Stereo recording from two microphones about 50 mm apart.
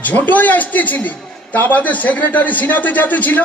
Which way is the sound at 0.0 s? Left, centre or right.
Left.